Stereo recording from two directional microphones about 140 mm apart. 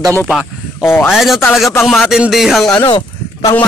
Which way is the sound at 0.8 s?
15° left (ahead or behind).